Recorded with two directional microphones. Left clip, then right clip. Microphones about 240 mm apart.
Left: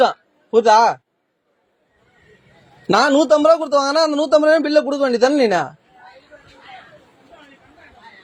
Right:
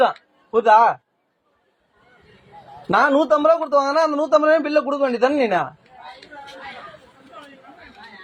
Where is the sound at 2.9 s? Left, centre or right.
Left.